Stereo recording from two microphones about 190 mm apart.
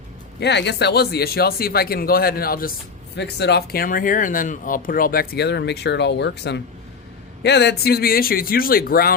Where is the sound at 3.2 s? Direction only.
60° left (ahead or behind).